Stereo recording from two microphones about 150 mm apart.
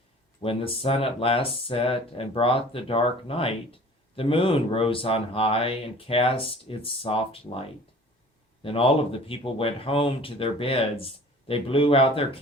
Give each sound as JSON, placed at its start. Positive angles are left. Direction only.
{"t": 0.4, "sound": "speech", "side_deg": 40}
{"t": 8.6, "sound": "speech", "side_deg": 40}